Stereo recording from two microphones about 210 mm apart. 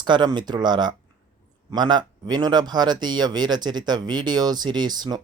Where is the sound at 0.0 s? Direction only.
20° right (ahead or behind).